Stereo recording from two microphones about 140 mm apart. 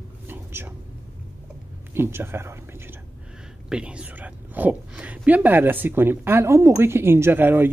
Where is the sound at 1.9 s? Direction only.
15° right (ahead or behind).